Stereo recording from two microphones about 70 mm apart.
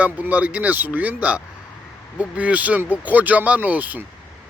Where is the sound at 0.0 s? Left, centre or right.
Right.